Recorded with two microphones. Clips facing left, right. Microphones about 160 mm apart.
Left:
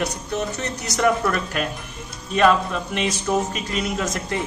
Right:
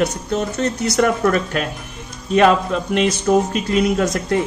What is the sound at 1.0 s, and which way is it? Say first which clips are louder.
Speech: right 3 dB; 50° right (ahead or behind).